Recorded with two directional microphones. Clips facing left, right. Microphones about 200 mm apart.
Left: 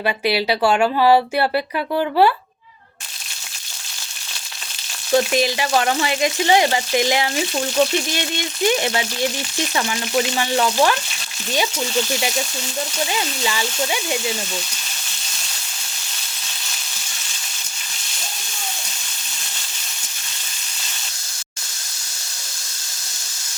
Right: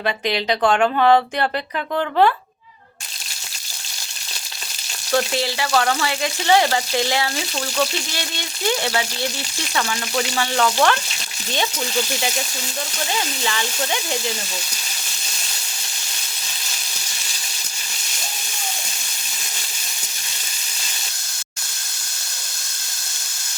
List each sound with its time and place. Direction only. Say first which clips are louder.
0.0 s speech: left 2 dB; 10° left (ahead or behind)
5.1 s speech: left 4 dB; 15° left (ahead or behind)
8.7 s speech: left 2 dB; 15° left (ahead or behind)
13.4 s speech: left 2 dB; 10° left (ahead or behind)